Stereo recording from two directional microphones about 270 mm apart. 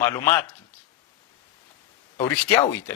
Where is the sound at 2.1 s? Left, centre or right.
Centre.